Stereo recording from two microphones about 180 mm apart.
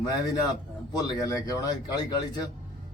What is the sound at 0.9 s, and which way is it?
Speech, 20° left (ahead or behind).